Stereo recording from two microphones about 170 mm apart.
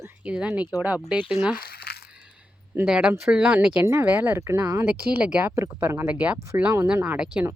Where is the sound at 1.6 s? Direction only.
65° left (ahead or behind).